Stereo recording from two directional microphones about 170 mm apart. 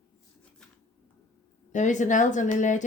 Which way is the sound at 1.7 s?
45° left (ahead or behind).